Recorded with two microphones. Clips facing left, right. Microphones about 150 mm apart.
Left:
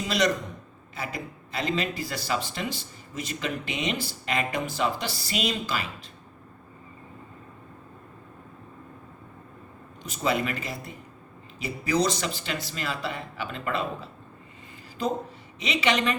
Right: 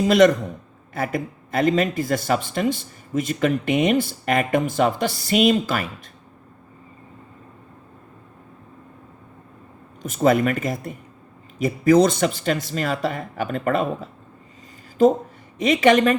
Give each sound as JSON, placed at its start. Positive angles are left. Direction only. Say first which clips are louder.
{"t": 0.0, "sound": "speech", "louder": "right 10 dB", "side_deg": -50}
{"t": 10.0, "sound": "speech", "louder": "right 9 dB", "side_deg": -50}
{"t": 15.5, "sound": "speech", "louder": "right 10 dB", "side_deg": -50}